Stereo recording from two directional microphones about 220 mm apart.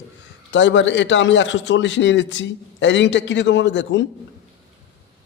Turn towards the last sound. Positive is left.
turn(degrees=55)  # may be behind; listen again after turning